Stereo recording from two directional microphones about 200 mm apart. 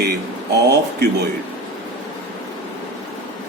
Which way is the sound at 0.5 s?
55° right (ahead or behind).